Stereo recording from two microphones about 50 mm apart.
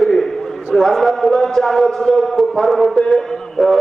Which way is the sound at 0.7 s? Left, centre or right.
Centre.